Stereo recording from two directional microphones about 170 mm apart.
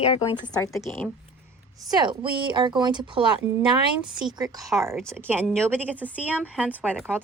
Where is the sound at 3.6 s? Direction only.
5° right (ahead or behind).